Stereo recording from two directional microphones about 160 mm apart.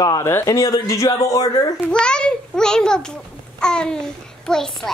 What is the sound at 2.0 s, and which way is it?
A child's voice, 5° left (ahead or behind).